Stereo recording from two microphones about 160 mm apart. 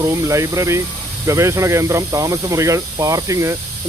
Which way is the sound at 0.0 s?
20° right (ahead or behind).